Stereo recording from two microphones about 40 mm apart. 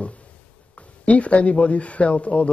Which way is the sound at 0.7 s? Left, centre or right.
Left.